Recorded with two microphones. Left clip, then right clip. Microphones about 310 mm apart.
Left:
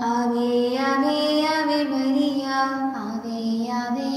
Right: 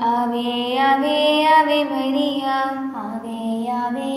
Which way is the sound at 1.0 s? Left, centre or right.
Right.